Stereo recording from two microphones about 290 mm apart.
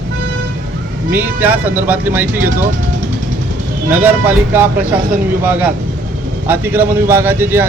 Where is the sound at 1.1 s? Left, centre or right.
Centre.